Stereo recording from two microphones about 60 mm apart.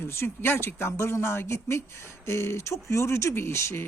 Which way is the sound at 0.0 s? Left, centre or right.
Left.